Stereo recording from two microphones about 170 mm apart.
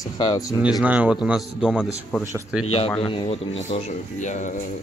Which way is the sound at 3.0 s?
30° left (ahead or behind).